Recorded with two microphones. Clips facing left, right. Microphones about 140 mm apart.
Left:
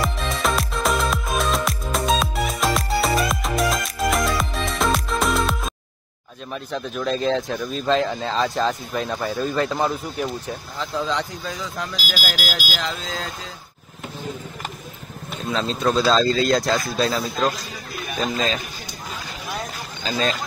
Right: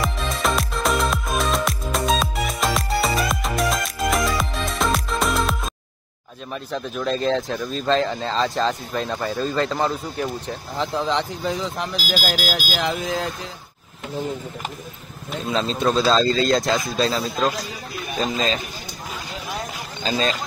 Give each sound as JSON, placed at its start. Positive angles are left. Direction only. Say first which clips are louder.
{"t": 0.0, "sound": "music", "louder": "even", "side_deg": 0}
{"t": 6.5, "sound": "speech", "louder": "even", "side_deg": 0}
{"t": 9.4, "sound": "speech", "louder": "even", "side_deg": 15}
{"t": 10.8, "sound": "speech", "louder": "right 3 dB", "side_deg": -20}
{"t": 15.5, "sound": "speech", "louder": "even", "side_deg": 0}
{"t": 20.0, "sound": "speech", "louder": "right 1 dB", "side_deg": 0}